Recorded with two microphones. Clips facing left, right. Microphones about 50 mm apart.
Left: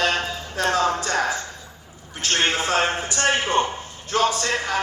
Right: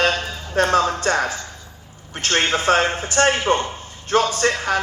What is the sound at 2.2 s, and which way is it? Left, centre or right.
Speech, right.